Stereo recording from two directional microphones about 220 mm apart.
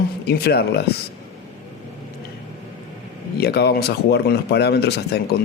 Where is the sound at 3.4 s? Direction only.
45° left (ahead or behind).